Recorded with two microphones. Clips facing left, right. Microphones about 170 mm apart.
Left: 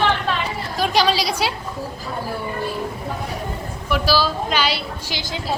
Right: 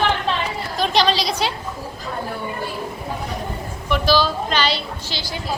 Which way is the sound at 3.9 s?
5° left (ahead or behind).